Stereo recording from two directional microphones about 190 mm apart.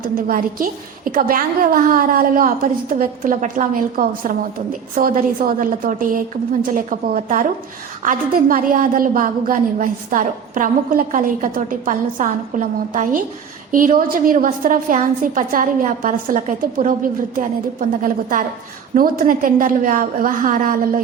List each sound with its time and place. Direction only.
0.0 s a woman's voice: 45° right (ahead or behind)